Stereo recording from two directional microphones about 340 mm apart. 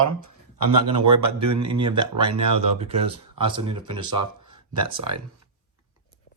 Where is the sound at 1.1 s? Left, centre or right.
Right.